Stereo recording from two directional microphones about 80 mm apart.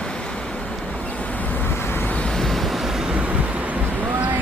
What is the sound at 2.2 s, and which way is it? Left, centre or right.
Vehicle, centre.